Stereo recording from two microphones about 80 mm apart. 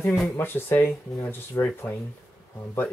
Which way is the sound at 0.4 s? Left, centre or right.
Left.